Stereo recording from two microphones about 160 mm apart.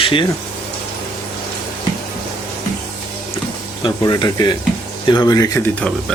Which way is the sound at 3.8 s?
25° left (ahead or behind).